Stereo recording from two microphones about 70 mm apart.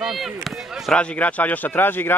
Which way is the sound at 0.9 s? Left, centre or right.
Centre.